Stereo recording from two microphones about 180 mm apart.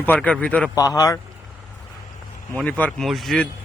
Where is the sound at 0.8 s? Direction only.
20° left (ahead or behind).